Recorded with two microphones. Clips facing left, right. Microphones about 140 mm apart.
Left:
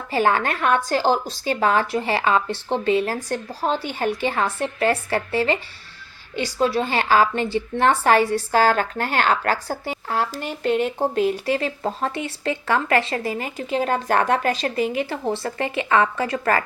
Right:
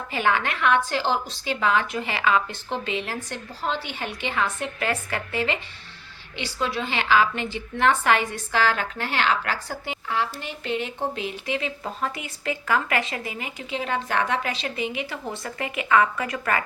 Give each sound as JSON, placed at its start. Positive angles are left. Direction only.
{"t": 0.1, "sound": "speech", "side_deg": 40}